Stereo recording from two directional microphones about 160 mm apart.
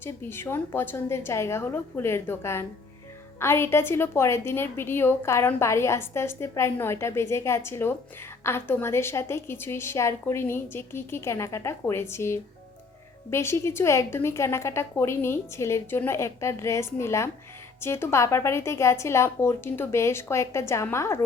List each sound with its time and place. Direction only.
0.0 s a woman's voice: 15° left (ahead or behind)